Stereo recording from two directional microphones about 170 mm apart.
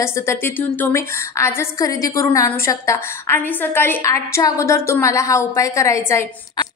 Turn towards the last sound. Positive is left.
turn(degrees=15)  # may be behind; listen again after turning